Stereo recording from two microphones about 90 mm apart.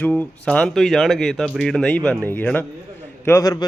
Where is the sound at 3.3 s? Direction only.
35° left (ahead or behind).